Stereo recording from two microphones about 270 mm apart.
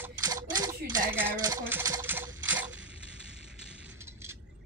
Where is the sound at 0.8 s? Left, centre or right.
Right.